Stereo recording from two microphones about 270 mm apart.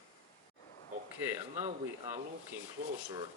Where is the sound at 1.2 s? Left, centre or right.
Centre.